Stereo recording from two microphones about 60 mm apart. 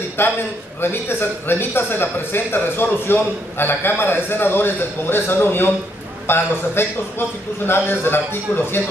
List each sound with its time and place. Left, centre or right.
0.2 s a man's voice: left